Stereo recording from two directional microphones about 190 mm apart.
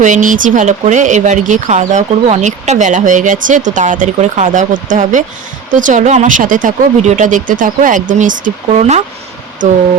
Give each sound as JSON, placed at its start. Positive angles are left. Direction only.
{"t": 0.0, "sound": "speech", "side_deg": -40}